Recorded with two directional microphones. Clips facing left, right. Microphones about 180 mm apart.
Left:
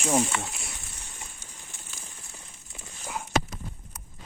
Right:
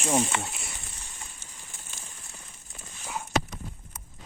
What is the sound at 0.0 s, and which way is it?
Speech, centre (ahead or behind).